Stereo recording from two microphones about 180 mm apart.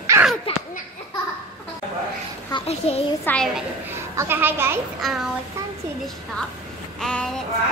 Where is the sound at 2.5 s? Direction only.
35° left (ahead or behind).